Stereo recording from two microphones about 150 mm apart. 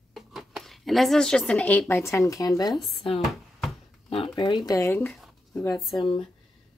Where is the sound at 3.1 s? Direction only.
Centre (ahead or behind).